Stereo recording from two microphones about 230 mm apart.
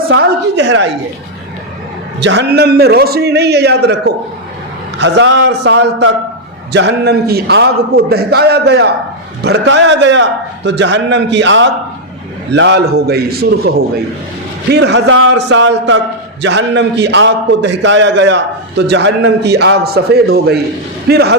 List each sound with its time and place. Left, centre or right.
0.1 s a man's voice: right
2.2 s a man's voice: right
14.7 s a man's voice: right